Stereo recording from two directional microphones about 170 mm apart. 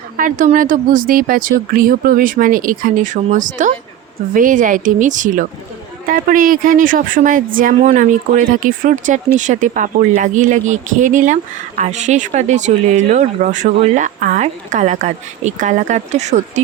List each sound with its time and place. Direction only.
0.2 s speech: 50° right (ahead or behind)